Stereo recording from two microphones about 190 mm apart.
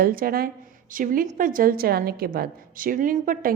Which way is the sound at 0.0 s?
50° right (ahead or behind).